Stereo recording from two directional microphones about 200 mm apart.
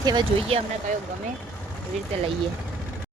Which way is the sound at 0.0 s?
20° right (ahead or behind).